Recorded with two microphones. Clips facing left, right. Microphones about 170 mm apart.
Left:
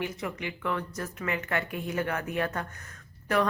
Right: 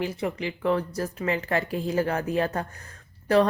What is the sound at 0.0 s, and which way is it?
A woman's voice, 30° right (ahead or behind).